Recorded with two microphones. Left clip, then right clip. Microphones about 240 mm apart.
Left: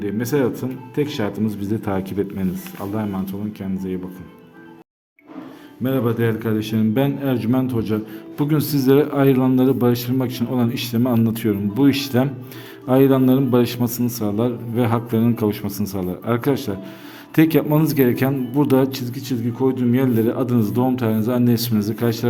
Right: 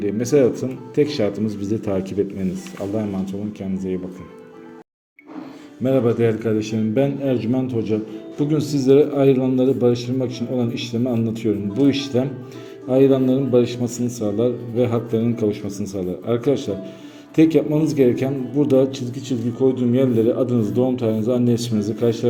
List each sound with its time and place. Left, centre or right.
0.0 s speech: centre
5.8 s a man's voice: centre